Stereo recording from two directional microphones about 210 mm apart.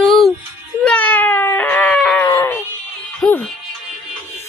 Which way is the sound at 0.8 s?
5° left (ahead or behind).